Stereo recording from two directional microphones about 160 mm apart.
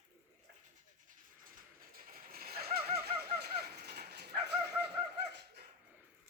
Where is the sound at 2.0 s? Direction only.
60° right (ahead or behind); by 3.2 s 80° right.